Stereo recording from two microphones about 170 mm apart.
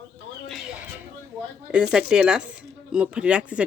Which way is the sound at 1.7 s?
5° right (ahead or behind).